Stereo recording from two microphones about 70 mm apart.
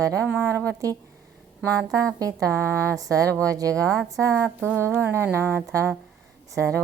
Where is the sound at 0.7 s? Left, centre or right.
Right.